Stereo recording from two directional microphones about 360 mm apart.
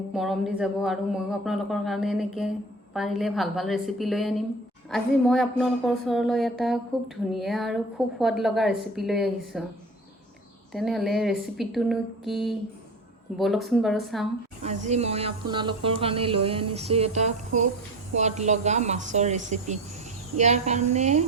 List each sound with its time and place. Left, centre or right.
0.1 s speech: centre
10.7 s speech: centre
14.6 s speech: centre